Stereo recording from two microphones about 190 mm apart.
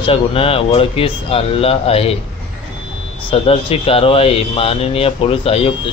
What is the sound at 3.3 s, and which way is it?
Speech, 30° left (ahead or behind).